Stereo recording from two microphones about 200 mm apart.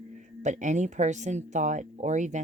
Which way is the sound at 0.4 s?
35° right (ahead or behind).